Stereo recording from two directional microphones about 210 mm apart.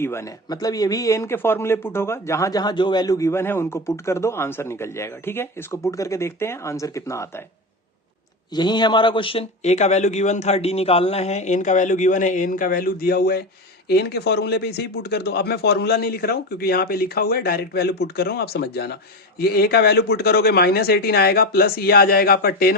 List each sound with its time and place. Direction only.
0.0 s a man's voice: 10° left (ahead or behind)
8.5 s speech: 20° left (ahead or behind); by 22.7 s 45° left (ahead or behind)